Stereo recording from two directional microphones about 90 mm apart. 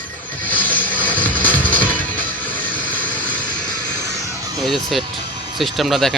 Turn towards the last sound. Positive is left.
turn(degrees=0)  # may be behind; listen again after turning